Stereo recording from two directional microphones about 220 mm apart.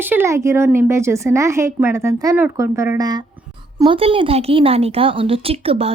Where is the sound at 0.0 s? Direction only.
10° right (ahead or behind).